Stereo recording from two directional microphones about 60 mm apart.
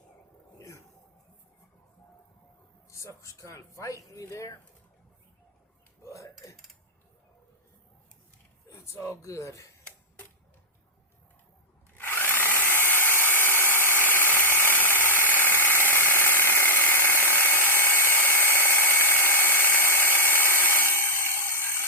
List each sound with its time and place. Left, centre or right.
2.9 s speech: left
6.0 s dishes: left
8.6 s speech: left
11.9 s drill: left